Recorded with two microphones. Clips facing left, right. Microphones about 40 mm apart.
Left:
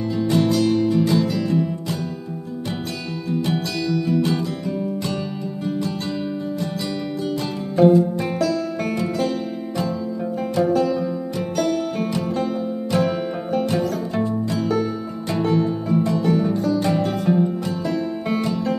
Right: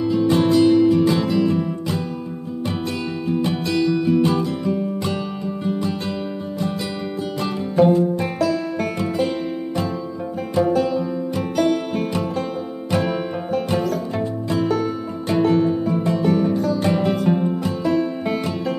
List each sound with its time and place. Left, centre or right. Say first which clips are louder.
0.1 s music: right 3 dB; right
3.3 s music: right 1 dB; right
7.7 s music: left 1 dB; centre
10.5 s music: right 1 dB; centre
11.3 s music: right 3 dB; right
13.0 s music: left 1 dB; centre
15.4 s music: right 3 dB; centre
16.8 s music: right 1 dB; right
17.1 s music: right 1 dB; centre
17.4 s music: left 1 dB; right
17.8 s music: right 5 dB; centre
18.4 s music: left 1 dB; centre